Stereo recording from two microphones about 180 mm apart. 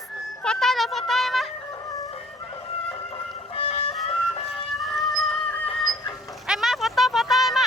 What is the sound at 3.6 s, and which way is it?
Music, 35° left (ahead or behind).